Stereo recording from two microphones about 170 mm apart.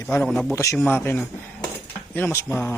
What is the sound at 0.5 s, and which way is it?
A man's voice, 15° left (ahead or behind).